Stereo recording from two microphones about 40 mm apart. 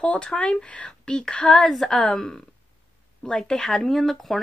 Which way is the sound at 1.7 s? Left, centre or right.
Centre.